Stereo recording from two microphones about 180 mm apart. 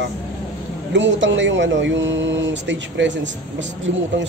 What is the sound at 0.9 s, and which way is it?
Speech, 90° right.